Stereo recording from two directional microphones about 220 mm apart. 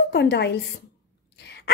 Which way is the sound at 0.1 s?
50° left (ahead or behind).